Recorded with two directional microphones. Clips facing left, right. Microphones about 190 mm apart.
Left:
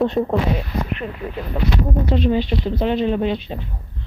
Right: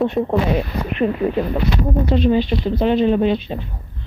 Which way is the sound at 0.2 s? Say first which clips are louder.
Even; centre (ahead or behind).